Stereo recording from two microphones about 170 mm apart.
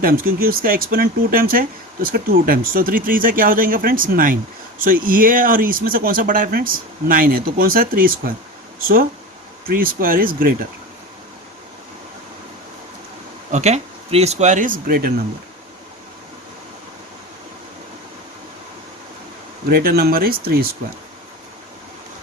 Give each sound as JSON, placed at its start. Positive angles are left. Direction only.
{"t": 0.0, "sound": "speech", "side_deg": -60}
{"t": 9.6, "sound": "speech", "side_deg": -55}
{"t": 13.5, "sound": "speech", "side_deg": -40}
{"t": 19.7, "sound": "speech", "side_deg": -65}